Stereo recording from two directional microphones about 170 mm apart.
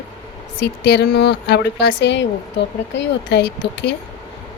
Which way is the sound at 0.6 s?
75° left (ahead or behind).